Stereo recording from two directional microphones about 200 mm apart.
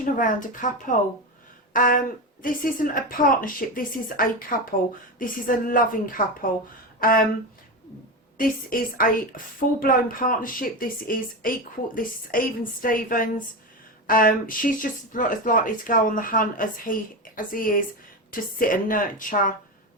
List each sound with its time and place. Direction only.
0.0 s speech: 40° left (ahead or behind)
8.4 s speech: 45° left (ahead or behind)